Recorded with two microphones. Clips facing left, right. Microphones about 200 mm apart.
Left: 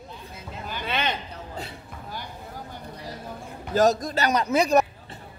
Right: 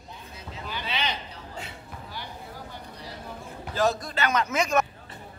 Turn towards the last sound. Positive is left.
turn(degrees=35)  # may be behind; listen again after turning